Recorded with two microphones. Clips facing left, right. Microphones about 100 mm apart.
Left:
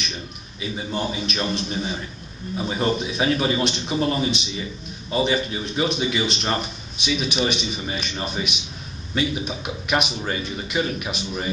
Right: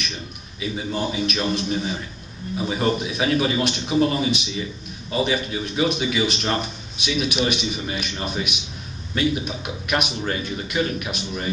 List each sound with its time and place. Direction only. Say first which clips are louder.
0.6 s a man's voice: right 1 dB; centre (ahead or behind)